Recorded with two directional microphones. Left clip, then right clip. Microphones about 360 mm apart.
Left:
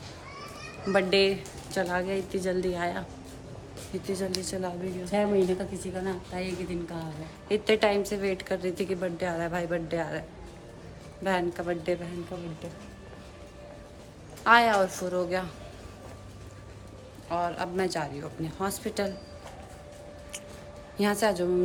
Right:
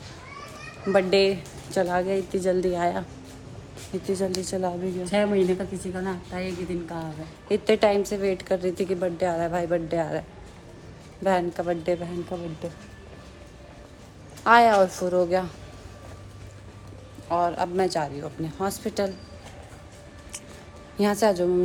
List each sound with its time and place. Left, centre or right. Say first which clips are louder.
0.9 s a woman's voice: right 3 dB; centre
5.0 s a woman's voice: right 3 dB; right
7.4 s a woman's voice: right 4 dB; centre
14.4 s a woman's voice: right 4 dB; centre
17.2 s a woman's voice: right 6 dB; centre
21.0 s a woman's voice: right 4 dB; centre